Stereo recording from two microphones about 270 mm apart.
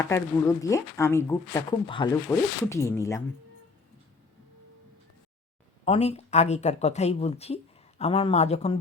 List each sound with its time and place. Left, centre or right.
0.0 s speech: centre
5.8 s speech: left